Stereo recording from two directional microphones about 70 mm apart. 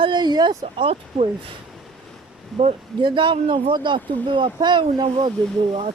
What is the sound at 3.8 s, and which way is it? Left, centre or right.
Speech, right.